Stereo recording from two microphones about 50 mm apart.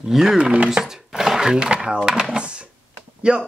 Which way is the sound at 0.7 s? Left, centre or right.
Centre.